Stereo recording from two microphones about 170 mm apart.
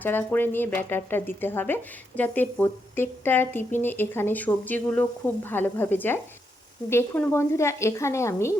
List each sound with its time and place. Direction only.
0.0 s speech: 10° left (ahead or behind)